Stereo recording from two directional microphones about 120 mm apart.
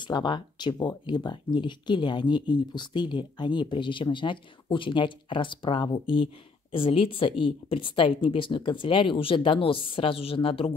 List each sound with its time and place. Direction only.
0.0 s speech: 40° left (ahead or behind)